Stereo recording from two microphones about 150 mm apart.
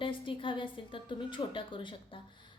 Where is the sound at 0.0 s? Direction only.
35° left (ahead or behind).